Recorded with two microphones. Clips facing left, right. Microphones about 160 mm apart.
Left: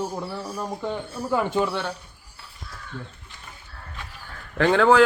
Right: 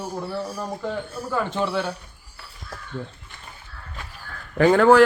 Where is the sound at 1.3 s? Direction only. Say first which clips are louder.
Left 2 dB; 10° left (ahead or behind).